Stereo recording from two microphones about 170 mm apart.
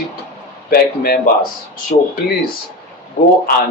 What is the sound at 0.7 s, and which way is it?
Speech, 65° left (ahead or behind).